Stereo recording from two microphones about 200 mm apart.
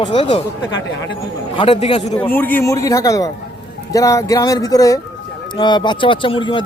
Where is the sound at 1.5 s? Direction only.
25° left (ahead or behind).